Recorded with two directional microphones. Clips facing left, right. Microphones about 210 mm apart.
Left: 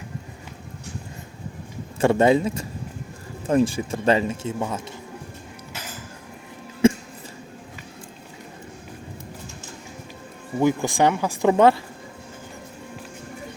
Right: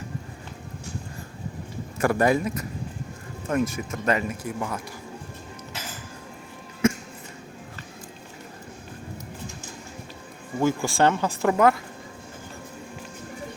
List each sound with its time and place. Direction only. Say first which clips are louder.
2.0 s speech: left 4 dB; 25° left (ahead or behind)
6.8 s a sound: left 5 dB; 30° left (ahead or behind)
10.6 s speech: left 2 dB; 20° left (ahead or behind)
11.5 s speech: left 4 dB; 30° left (ahead or behind)